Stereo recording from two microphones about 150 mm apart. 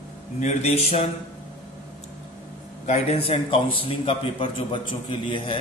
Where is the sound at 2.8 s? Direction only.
45° left (ahead or behind).